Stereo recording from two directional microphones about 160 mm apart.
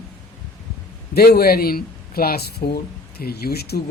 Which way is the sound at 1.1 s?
75° left (ahead or behind).